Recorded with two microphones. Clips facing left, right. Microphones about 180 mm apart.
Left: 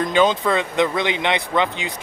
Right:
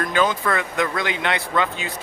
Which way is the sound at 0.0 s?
20° left (ahead or behind).